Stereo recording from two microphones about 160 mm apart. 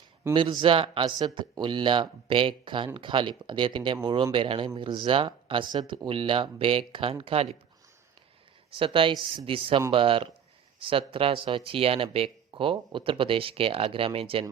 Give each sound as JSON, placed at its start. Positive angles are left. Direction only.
{"t": 0.3, "sound": "speech", "side_deg": -30}
{"t": 8.7, "sound": "speech", "side_deg": -35}